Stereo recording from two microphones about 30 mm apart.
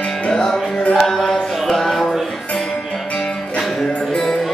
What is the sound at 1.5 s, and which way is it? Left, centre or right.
Music, centre.